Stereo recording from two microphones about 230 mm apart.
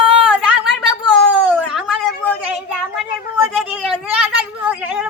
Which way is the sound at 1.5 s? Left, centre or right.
Centre.